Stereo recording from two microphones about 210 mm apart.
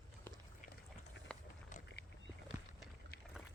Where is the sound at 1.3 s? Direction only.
5° left (ahead or behind).